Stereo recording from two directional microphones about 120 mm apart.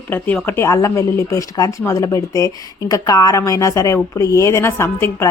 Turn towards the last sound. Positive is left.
turn(degrees=20)  # may be behind; listen again after turning